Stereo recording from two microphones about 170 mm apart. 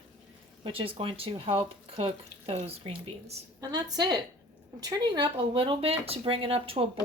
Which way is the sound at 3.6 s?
25° right (ahead or behind).